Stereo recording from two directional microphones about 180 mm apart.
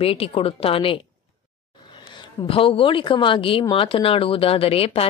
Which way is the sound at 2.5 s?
30° left (ahead or behind).